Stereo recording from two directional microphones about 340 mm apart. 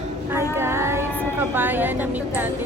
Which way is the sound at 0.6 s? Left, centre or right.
Centre.